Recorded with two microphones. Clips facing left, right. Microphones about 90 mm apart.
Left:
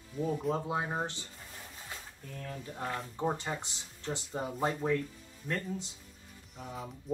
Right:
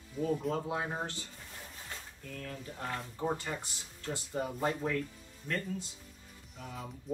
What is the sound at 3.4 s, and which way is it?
Speech, 20° left (ahead or behind).